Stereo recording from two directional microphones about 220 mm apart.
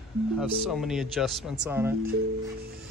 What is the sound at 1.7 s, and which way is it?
Speech, 10° right (ahead or behind).